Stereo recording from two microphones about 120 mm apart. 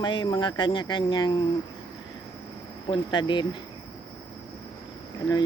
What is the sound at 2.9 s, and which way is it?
Speech, 40° left (ahead or behind).